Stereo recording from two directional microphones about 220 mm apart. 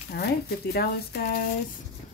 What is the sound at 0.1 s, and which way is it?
Speech, 45° left (ahead or behind).